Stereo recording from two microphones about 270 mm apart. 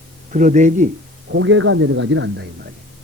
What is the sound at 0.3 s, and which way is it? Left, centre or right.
Speech, right.